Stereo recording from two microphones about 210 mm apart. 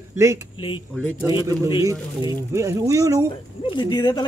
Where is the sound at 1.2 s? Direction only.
15° right (ahead or behind).